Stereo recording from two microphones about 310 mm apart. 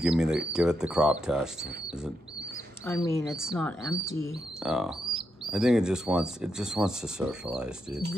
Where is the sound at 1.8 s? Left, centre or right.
Centre.